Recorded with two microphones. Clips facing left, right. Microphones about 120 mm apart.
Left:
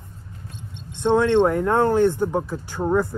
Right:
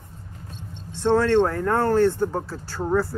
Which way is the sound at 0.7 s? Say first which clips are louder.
Left 1 dB; 20° left (ahead or behind).